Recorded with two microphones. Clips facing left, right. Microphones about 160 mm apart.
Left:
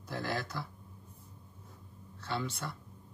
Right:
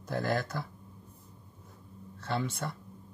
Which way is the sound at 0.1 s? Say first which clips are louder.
Right 5 dB; 50° right (ahead or behind).